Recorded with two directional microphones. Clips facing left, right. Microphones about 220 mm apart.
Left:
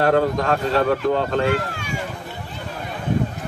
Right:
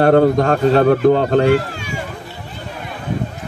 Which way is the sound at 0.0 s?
40° right (ahead or behind).